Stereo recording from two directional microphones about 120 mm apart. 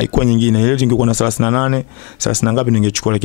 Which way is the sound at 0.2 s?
15° left (ahead or behind).